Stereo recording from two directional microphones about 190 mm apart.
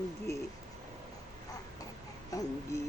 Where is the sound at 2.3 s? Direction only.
15° left (ahead or behind).